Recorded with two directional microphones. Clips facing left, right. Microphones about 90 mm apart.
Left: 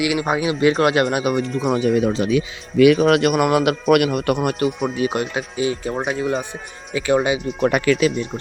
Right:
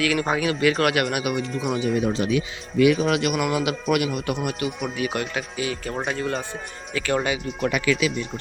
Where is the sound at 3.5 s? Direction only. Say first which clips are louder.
Left 7 dB; 60° left (ahead or behind).